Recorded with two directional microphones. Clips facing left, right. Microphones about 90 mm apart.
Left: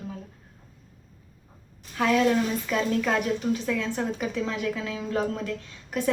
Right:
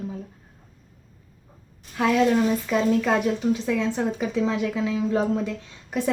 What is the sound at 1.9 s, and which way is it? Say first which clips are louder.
Speech: right 1 dB; 5° right (ahead or behind).